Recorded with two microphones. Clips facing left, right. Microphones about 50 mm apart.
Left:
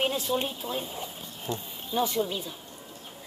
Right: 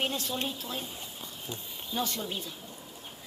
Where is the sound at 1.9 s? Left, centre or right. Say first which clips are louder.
Left 6 dB; centre.